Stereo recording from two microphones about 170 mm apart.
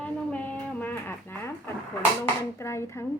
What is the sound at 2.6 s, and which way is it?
Speech, 15° left (ahead or behind).